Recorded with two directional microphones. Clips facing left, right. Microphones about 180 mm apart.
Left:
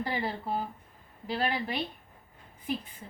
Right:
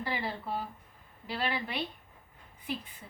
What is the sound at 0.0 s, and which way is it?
A woman's voice, 40° left (ahead or behind).